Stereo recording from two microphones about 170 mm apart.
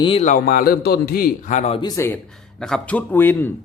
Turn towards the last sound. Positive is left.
turn(degrees=10)  # may be behind; listen again after turning